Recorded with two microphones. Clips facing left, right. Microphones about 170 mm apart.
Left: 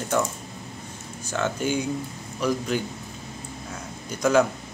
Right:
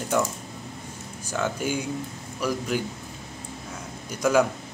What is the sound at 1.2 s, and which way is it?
Speech, 10° right (ahead or behind).